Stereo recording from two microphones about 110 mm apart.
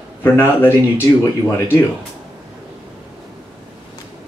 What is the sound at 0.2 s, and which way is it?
Speech, 20° left (ahead or behind).